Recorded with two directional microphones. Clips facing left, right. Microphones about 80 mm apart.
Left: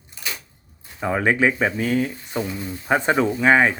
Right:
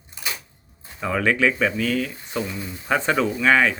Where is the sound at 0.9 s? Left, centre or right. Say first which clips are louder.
Left 1 dB; left.